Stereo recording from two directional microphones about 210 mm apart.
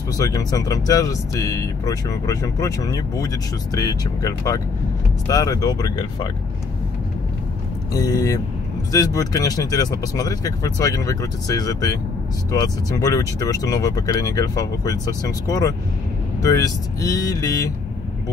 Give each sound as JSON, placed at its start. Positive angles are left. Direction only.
{"t": 0.2, "sound": "speech", "side_deg": 15}
{"t": 7.9, "sound": "speech", "side_deg": 15}